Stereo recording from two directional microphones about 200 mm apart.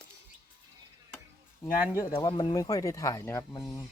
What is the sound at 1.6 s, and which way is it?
Speech, 15° left (ahead or behind).